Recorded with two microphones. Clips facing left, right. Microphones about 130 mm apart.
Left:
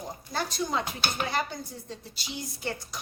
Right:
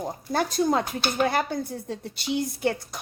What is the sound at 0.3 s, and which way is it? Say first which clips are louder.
Speech: right 8 dB; 50° right (ahead or behind).